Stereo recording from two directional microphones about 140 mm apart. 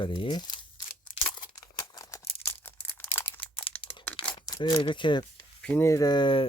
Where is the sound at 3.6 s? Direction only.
35° left (ahead or behind).